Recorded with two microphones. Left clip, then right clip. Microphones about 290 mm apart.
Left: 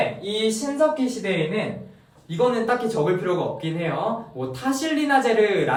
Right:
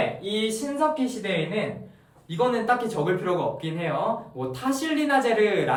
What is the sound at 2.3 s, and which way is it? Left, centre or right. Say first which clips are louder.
Speech: left 2 dB; centre.